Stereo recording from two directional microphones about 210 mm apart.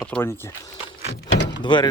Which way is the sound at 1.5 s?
20° left (ahead or behind).